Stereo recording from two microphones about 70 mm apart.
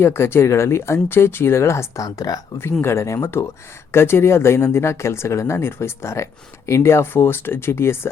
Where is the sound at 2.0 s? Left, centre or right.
Left.